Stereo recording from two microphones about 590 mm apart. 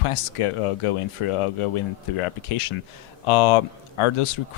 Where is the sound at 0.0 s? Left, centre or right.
Left.